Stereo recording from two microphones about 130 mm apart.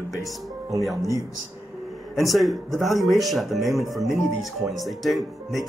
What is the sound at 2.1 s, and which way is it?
Speech, centre (ahead or behind).